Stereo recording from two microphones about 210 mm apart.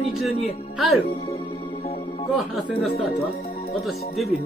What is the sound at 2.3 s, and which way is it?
Speech, centre (ahead or behind).